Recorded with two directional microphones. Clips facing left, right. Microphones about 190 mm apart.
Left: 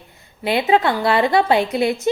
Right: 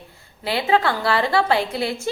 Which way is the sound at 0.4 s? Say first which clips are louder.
Left 3 dB; 20° left (ahead or behind).